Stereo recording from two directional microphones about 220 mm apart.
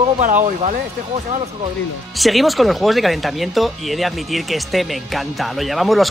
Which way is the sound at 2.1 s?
Centre (ahead or behind).